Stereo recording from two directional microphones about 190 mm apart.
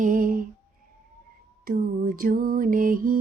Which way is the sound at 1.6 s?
45° right (ahead or behind).